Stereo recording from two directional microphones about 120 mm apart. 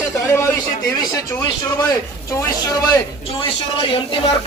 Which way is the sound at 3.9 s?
50° left (ahead or behind).